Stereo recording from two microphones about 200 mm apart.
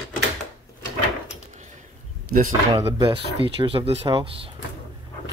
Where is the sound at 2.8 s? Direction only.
25° right (ahead or behind).